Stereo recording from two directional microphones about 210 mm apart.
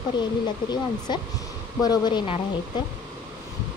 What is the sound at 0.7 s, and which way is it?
Speech, 20° left (ahead or behind).